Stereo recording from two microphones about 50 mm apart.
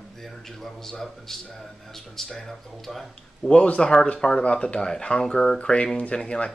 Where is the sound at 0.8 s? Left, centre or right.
Centre.